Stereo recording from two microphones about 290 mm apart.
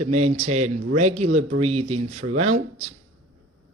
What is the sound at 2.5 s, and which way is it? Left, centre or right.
Speech, right.